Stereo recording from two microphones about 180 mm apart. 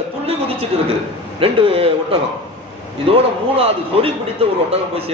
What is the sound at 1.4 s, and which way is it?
A man's voice, 30° right (ahead or behind).